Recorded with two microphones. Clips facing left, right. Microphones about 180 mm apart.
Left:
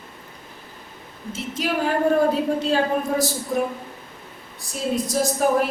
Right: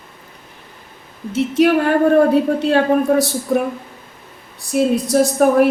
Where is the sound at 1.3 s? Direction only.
65° right (ahead or behind).